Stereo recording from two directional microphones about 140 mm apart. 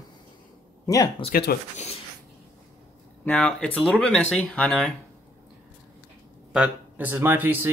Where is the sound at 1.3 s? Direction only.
90° left.